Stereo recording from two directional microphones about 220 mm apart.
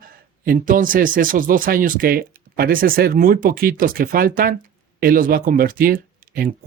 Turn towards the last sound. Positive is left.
turn(degrees=-40)  # may be behind; listen again after turning